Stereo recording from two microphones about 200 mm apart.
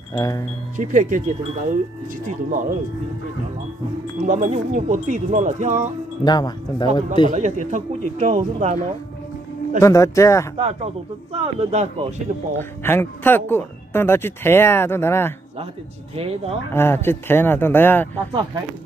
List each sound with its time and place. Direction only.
0.1 s speech: 15° left (ahead or behind)
0.7 s speech: 40° right (ahead or behind)
4.2 s speech: 40° right (ahead or behind)
6.2 s speech: 20° left (ahead or behind)
7.2 s speech: 35° right (ahead or behind)
9.8 s speech: 15° left (ahead or behind)
10.6 s speech: 30° right (ahead or behind)
12.5 s speech: 10° left (ahead or behind)
16.2 s speech: 30° right (ahead or behind)
16.7 s speech: 10° left (ahead or behind)